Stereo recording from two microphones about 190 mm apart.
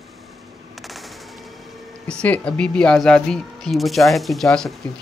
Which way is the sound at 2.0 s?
5° left (ahead or behind).